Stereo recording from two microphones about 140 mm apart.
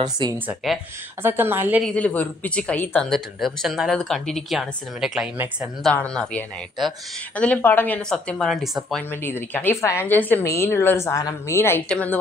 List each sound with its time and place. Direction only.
0.0 s speech: 30° right (ahead or behind)
0.6 s speech: centre (ahead or behind)
1.2 s a woman's voice: 15° right (ahead or behind)
1.8 s a woman's voice: 10° left (ahead or behind)
9.1 s a woman's voice: 15° left (ahead or behind)